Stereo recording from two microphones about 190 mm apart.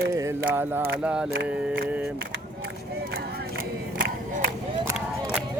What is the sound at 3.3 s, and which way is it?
Crowd, 55° right (ahead or behind).